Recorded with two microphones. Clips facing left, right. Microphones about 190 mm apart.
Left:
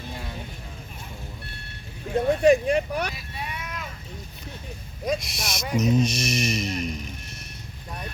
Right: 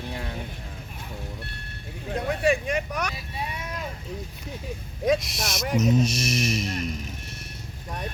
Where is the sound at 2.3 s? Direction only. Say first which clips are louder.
Left 6 dB; 40° left (ahead or behind).